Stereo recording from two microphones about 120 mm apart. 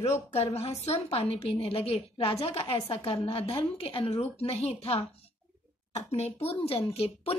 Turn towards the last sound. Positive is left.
turn(degrees=55)  # may be behind; listen again after turning